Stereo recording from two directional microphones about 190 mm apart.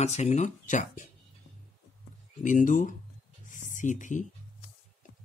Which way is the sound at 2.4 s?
40° left (ahead or behind).